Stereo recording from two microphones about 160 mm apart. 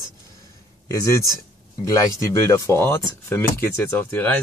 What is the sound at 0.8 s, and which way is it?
Speech, 20° left (ahead or behind).